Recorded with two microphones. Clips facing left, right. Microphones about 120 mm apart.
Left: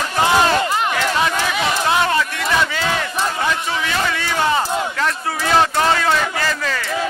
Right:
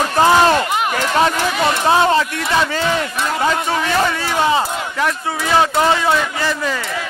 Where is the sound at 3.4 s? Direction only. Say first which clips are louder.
Right 4 dB; 40° right (ahead or behind).